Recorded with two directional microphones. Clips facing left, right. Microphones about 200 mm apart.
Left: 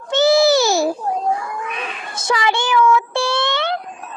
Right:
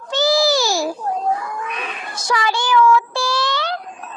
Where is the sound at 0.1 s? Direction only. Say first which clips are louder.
Left 4 dB; 25° left (ahead or behind).